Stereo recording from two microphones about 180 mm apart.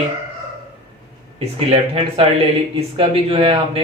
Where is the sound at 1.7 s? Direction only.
30° right (ahead or behind).